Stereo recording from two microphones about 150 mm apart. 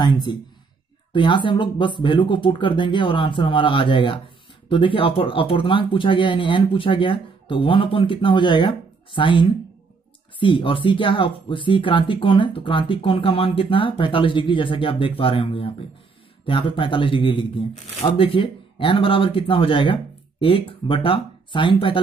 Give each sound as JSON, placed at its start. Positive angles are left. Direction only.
{"t": 0.0, "sound": "speech", "side_deg": 30}